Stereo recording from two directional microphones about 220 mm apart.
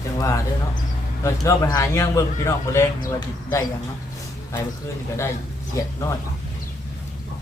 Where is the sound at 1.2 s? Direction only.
15° left (ahead or behind).